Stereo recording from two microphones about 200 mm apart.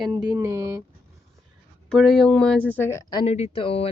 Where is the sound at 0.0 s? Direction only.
20° right (ahead or behind).